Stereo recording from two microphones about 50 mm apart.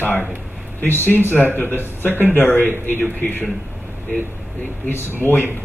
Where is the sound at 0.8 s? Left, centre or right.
Left.